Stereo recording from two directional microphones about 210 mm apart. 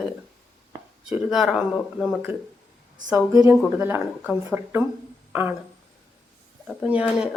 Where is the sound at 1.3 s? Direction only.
Centre (ahead or behind).